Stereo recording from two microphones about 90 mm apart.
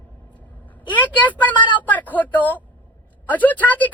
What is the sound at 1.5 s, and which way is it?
Speech, 60° left (ahead or behind).